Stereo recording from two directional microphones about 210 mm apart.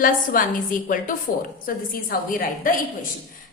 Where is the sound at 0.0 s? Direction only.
40° left (ahead or behind).